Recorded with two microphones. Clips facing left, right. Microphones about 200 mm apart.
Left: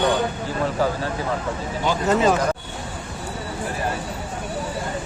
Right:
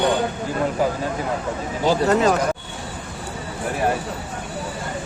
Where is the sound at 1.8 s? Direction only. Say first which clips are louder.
Right 5 dB; 35° right (ahead or behind).